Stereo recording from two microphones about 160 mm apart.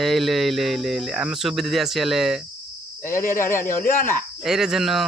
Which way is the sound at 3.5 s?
60° left (ahead or behind).